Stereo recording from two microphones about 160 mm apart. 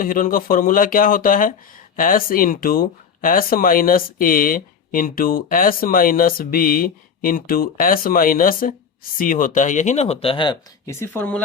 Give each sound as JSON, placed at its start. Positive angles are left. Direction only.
{"t": 0.0, "sound": "speech", "side_deg": 60}
{"t": 10.8, "sound": "speech", "side_deg": 15}